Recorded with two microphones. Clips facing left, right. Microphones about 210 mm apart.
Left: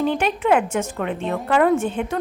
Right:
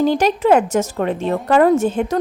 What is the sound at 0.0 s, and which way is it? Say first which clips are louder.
A woman's voice: right 5 dB; 40° right (ahead or behind).